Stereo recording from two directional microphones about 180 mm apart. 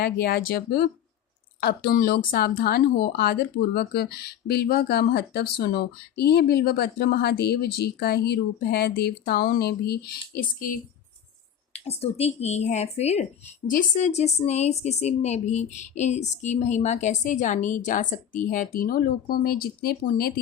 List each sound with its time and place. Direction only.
0.0 s speech: 60° left (ahead or behind)
11.7 s a woman's voice: 35° left (ahead or behind); by 20.4 s 60° left (ahead or behind)